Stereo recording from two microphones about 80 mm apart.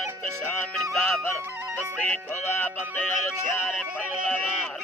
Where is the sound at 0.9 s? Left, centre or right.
Centre.